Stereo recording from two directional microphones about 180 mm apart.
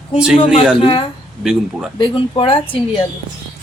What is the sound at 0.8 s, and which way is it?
Speech, 30° left (ahead or behind).